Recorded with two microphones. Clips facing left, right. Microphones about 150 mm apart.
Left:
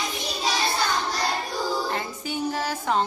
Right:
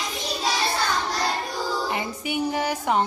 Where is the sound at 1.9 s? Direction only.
15° right (ahead or behind).